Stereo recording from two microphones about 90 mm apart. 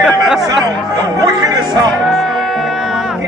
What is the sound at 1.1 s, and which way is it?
Music, 45° right (ahead or behind).